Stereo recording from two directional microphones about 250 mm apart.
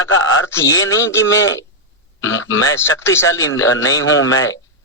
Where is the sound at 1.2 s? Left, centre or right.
Left.